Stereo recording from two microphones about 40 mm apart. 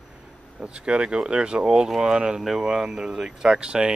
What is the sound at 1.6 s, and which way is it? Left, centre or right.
Speech, centre.